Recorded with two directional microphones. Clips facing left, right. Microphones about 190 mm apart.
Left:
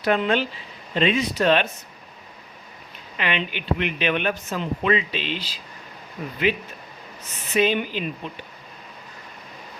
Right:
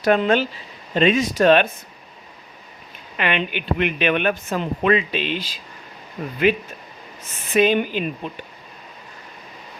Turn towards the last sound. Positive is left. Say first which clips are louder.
# right 4 dB
turn(degrees=-50)  # may be behind; listen again after turning